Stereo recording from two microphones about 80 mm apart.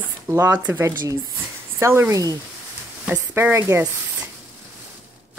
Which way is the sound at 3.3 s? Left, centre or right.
Right.